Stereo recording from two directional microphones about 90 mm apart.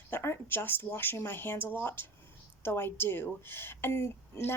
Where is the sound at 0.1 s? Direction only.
25° left (ahead or behind).